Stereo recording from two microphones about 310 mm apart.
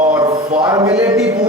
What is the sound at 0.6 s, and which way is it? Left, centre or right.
Speech, centre.